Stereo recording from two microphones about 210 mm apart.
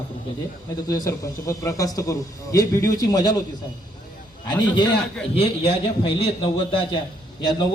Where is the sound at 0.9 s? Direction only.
15° left (ahead or behind).